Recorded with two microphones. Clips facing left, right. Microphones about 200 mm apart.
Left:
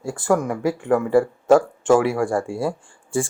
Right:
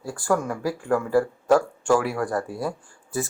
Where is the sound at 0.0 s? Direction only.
25° left (ahead or behind).